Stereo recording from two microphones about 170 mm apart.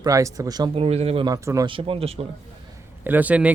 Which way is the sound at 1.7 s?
30° right (ahead or behind).